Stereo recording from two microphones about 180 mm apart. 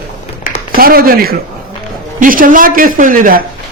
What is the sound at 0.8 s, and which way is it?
A man's voice, 55° right (ahead or behind).